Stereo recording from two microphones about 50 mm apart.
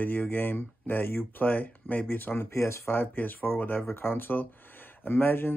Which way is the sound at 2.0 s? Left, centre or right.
Left.